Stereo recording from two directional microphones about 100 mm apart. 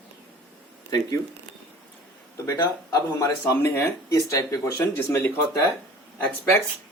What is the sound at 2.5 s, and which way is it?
Speech, 35° left (ahead or behind).